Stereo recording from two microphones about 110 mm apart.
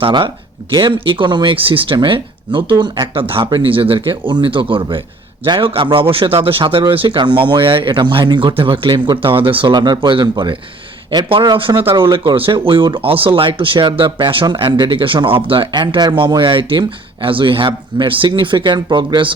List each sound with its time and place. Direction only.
0.0 s speech: 45° right (ahead or behind)